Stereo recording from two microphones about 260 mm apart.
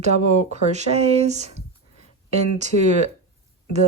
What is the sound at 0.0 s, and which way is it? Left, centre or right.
Speech, right.